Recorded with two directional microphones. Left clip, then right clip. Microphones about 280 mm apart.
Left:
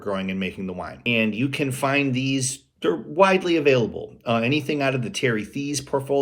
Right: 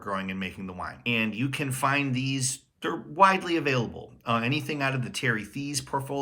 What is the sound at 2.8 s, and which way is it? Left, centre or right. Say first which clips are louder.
Speech: left 3 dB; centre.